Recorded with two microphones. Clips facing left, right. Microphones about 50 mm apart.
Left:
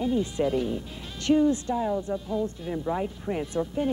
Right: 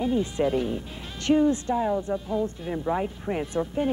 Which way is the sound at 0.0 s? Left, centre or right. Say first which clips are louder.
Right 1 dB; right.